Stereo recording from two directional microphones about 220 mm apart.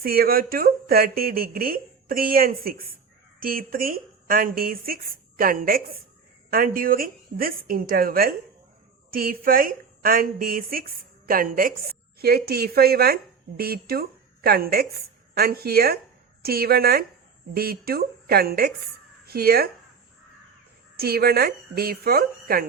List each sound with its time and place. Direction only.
0.0 s a woman's voice: 45° right (ahead or behind)
20.9 s speech: 45° right (ahead or behind)